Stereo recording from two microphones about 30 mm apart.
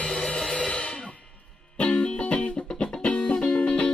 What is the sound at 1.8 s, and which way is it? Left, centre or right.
Music, left.